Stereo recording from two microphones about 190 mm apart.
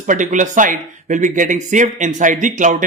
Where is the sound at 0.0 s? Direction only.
40° right (ahead or behind).